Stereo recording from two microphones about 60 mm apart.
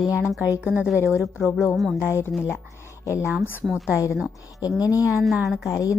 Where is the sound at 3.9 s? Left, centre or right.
Left.